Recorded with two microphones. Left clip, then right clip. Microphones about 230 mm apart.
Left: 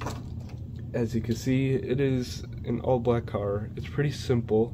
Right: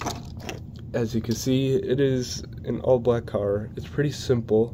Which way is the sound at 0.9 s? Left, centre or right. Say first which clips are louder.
Right 3 dB; centre.